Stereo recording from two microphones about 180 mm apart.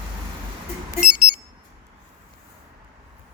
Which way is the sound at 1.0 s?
5° right (ahead or behind).